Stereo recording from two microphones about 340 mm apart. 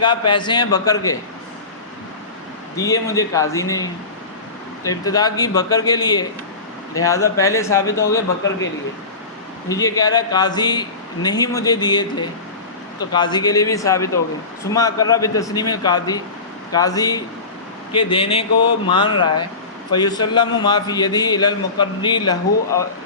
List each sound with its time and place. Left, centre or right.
0.0 s a man's voice: centre
2.7 s a man's voice: centre
5.0 s a man's voice: centre
9.6 s a man's voice: centre
13.1 s a man's voice: centre